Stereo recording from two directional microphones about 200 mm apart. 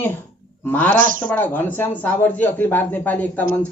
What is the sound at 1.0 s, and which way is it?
Speech, 45° right (ahead or behind).